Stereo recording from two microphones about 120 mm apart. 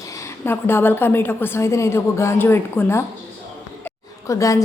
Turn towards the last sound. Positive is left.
turn(degrees=30)  # may be behind; listen again after turning